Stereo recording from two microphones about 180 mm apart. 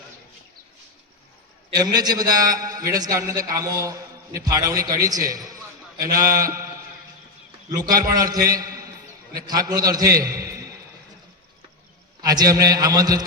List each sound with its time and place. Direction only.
1.7 s a man's voice: 20° right (ahead or behind)
7.9 s a man's voice: 20° right (ahead or behind)
12.2 s a man's voice: 20° right (ahead or behind)